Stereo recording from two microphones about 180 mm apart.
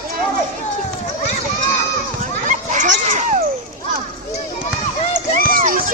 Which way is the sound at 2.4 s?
45° right (ahead or behind).